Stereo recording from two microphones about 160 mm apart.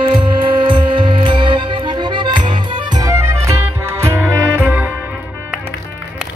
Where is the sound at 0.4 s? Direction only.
30° right (ahead or behind); by 4.8 s 10° right (ahead or behind).